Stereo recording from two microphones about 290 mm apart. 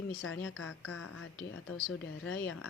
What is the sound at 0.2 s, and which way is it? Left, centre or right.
Speech, left.